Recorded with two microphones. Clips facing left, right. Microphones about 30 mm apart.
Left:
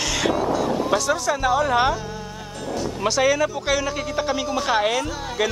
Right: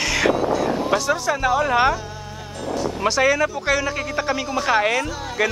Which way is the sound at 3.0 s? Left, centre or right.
Centre.